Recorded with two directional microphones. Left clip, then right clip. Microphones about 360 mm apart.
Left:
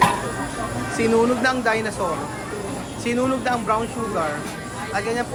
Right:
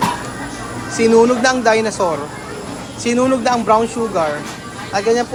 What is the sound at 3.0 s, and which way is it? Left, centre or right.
Speech, centre.